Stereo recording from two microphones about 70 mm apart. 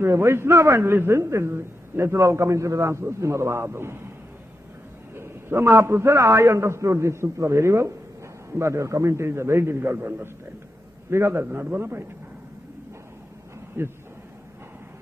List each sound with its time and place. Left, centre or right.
0.0 s a man's voice: right
5.1 s a man's voice: right
13.8 s a man's voice: right